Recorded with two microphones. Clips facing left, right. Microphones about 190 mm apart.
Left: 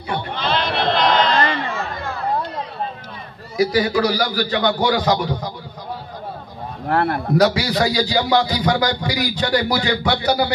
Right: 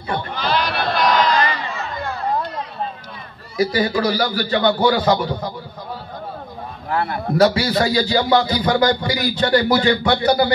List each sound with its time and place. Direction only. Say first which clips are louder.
0.4 s a sound: left 1 dB; 25° left (ahead or behind)
3.5 s speech: left 1 dB; 10° left (ahead or behind)
6.9 s speech: left 3 dB; 55° left (ahead or behind)
7.3 s speech: right 2 dB; 15° left (ahead or behind)